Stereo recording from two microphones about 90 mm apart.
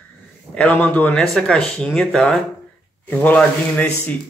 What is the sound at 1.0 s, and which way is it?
Speech, 5° left (ahead or behind).